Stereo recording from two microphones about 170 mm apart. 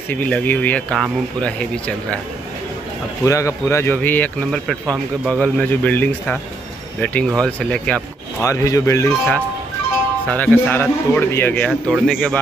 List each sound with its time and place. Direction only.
0.1 s a man's voice: 10° left (ahead or behind)
3.3 s a man's voice: 20° left (ahead or behind)
8.4 s a man's voice: 20° left (ahead or behind); by 12.4 s centre (ahead or behind)